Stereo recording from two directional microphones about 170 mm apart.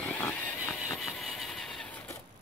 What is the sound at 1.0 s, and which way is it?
Vehicle, centre (ahead or behind).